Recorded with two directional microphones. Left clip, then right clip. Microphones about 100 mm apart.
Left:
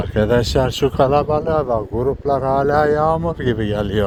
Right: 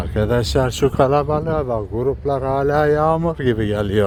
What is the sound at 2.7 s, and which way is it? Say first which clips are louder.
Speech: right 1 dB; 60° right (ahead or behind).